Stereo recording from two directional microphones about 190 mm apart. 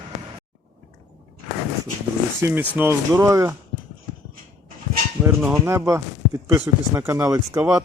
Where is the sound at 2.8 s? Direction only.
15° right (ahead or behind).